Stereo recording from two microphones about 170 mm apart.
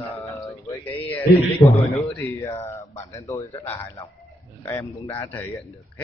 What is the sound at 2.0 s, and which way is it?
Speech, 15° left (ahead or behind).